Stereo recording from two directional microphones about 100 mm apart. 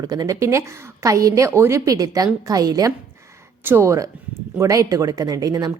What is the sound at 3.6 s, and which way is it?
A woman's voice, 25° right (ahead or behind).